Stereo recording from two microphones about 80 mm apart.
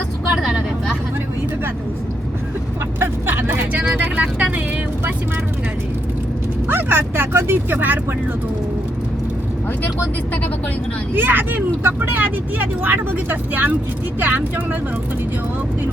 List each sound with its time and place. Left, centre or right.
0.3 s vehicle: centre
3.0 s vehicle: right
6.7 s speech: right
11.1 s speech: right